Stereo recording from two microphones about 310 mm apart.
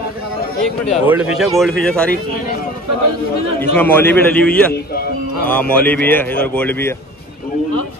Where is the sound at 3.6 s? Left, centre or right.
Centre.